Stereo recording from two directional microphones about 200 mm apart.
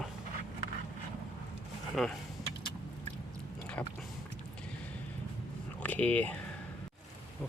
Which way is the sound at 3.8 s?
5° left (ahead or behind).